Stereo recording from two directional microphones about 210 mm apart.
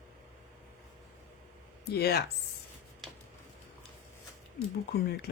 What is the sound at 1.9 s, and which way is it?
Speech, 50° left (ahead or behind).